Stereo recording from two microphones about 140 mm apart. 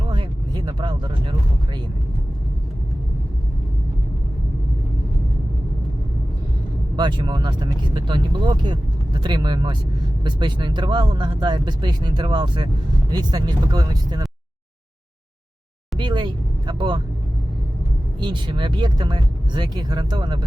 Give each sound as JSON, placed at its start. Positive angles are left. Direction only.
{"t": 0.1, "sound": "a sound", "side_deg": -35}
{"t": 6.9, "sound": "speech", "side_deg": -30}
{"t": 16.0, "sound": "vehicle", "side_deg": -35}
{"t": 18.2, "sound": "speech", "side_deg": -35}